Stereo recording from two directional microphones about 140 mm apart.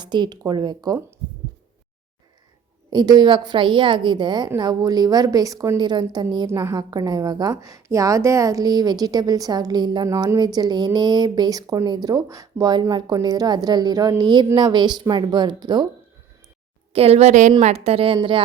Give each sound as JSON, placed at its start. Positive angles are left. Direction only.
{"t": 0.0, "sound": "a woman's voice", "side_deg": -30}
{"t": 2.9, "sound": "a woman's voice", "side_deg": -30}
{"t": 6.5, "sound": "a woman's voice", "side_deg": -20}
{"t": 6.7, "sound": "a woman's voice", "side_deg": -30}
{"t": 16.9, "sound": "a woman's voice", "side_deg": -45}